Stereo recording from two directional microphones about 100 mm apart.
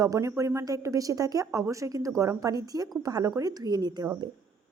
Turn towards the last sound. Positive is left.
turn(degrees=-45)  # may be behind; listen again after turning